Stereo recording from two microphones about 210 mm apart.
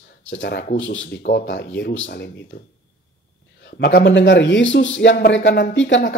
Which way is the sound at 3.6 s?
50° left (ahead or behind).